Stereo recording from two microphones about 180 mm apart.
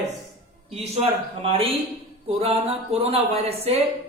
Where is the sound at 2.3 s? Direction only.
30° right (ahead or behind).